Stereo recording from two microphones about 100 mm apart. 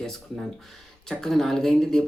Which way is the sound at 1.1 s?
5° left (ahead or behind).